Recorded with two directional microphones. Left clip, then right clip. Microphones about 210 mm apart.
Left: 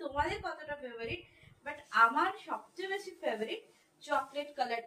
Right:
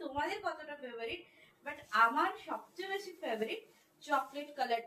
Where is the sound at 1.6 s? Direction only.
20° left (ahead or behind).